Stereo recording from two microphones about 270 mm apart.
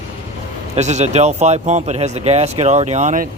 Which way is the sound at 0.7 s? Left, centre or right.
Right.